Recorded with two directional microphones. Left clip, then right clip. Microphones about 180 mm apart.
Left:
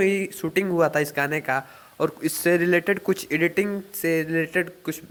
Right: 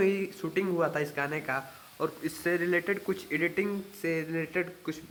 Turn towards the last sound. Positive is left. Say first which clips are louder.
# left 7 dB
turn(degrees=30)  # may be behind; listen again after turning